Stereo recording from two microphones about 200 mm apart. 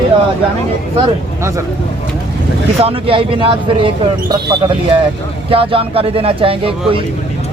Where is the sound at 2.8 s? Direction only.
30° right (ahead or behind).